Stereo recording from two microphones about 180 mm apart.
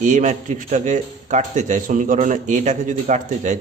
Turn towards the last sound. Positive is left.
turn(degrees=-45)  # may be behind; listen again after turning